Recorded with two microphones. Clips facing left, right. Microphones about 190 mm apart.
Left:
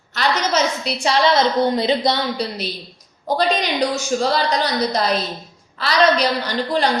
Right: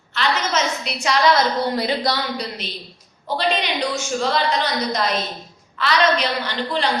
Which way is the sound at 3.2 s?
40° left (ahead or behind).